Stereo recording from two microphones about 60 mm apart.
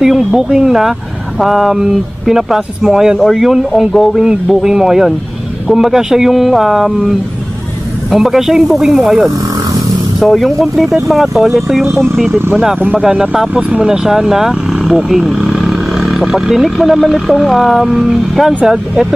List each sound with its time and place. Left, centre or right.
0.0 s speech: centre
3.2 s speech: centre
3.4 s speech: centre
4.2 s speech: centre
8.1 s speech: centre
12.3 s speech: right
13.0 s speech: centre